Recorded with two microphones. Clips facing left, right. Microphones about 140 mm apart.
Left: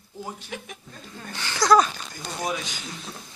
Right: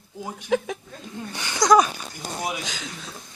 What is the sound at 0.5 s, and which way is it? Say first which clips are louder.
Speech: right 19 dB; 90° right.